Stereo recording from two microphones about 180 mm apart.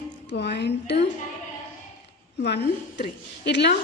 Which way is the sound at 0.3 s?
70° left (ahead or behind).